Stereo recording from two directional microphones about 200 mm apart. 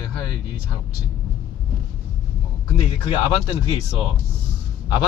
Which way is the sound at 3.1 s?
25° left (ahead or behind).